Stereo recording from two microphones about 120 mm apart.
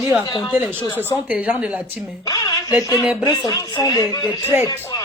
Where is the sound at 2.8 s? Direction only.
30° left (ahead or behind).